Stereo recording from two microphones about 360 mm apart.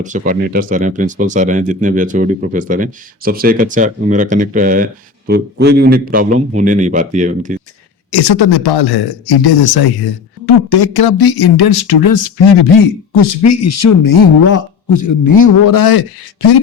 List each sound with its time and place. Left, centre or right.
0.0 s speech: right
8.1 s speech: left